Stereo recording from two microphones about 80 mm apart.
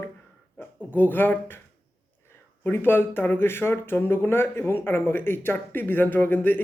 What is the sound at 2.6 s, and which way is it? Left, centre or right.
Speech, left.